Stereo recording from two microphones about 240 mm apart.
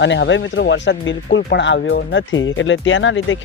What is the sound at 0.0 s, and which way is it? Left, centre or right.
Speech, left.